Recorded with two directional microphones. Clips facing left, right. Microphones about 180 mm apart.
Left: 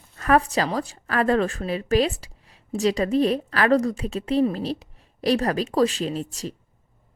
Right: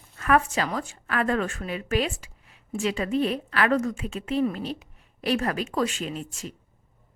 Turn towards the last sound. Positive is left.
turn(degrees=35)  # may be behind; listen again after turning